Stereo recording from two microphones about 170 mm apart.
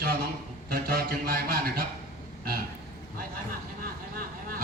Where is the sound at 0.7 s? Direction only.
65° right (ahead or behind).